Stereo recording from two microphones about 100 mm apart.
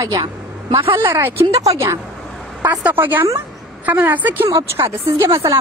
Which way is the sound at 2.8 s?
20° right (ahead or behind).